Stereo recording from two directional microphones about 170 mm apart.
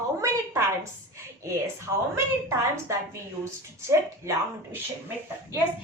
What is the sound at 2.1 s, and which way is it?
A woman's voice, 15° right (ahead or behind).